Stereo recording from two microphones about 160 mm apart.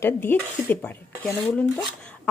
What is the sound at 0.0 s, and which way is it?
Speech, 15° left (ahead or behind).